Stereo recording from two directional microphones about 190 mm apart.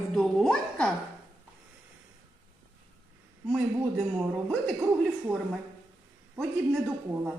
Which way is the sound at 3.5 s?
5° right (ahead or behind).